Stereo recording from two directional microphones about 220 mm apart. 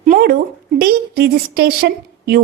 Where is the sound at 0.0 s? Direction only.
40° right (ahead or behind).